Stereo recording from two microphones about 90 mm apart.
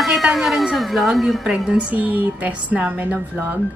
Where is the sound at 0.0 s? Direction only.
Centre (ahead or behind).